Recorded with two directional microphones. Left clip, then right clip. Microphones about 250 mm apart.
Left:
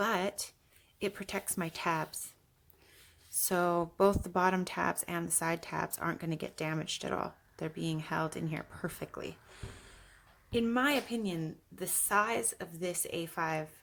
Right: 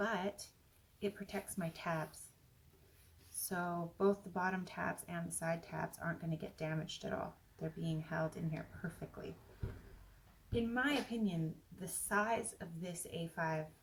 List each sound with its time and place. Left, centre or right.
0.0 s a sound: left
0.9 s speech: left
3.5 s speech: left
10.5 s speech: left